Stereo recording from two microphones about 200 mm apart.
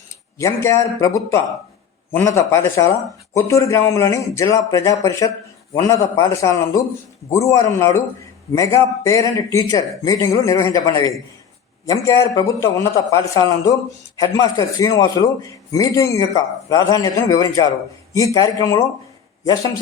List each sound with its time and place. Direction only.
0.3 s a man's voice: 15° left (ahead or behind)